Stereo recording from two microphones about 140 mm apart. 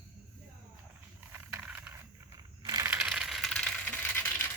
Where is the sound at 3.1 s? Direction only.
Centre (ahead or behind).